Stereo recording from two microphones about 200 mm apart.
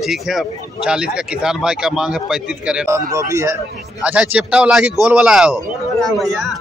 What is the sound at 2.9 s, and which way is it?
A man's voice, 15° right (ahead or behind).